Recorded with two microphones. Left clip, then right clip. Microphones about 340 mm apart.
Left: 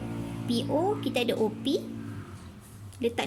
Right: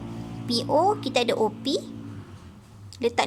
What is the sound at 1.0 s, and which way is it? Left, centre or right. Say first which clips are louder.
Speech: right 4 dB; centre.